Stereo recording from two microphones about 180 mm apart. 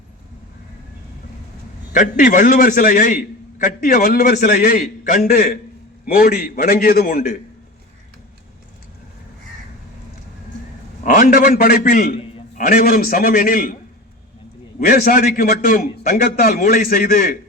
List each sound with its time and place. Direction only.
1.9 s a man's voice: 45° left (ahead or behind)
11.0 s a man's voice: 50° left (ahead or behind)
14.8 s a man's voice: 55° left (ahead or behind)